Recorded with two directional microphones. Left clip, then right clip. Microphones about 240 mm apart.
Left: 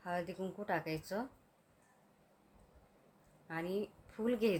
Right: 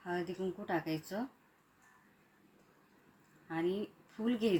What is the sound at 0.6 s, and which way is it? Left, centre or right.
Speech, left.